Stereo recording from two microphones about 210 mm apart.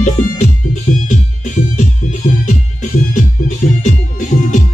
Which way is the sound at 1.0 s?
35° left (ahead or behind).